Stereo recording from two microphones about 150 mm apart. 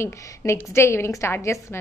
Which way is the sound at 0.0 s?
15° left (ahead or behind).